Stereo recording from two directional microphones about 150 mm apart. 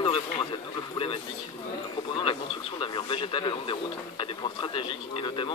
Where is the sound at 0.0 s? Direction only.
35° left (ahead or behind).